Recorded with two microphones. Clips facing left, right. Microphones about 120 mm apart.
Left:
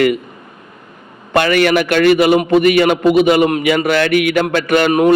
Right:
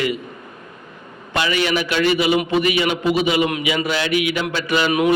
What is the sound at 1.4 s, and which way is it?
A man's voice, 55° left (ahead or behind).